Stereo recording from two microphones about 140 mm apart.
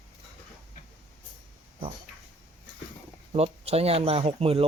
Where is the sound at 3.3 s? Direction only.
45° right (ahead or behind).